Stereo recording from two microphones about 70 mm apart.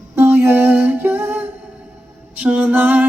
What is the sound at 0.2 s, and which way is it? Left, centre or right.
Music, right.